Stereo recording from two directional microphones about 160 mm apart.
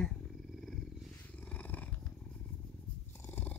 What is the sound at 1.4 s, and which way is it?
Purr, 10° left (ahead or behind).